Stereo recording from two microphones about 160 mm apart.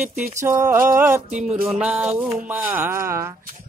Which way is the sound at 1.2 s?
50° right (ahead or behind).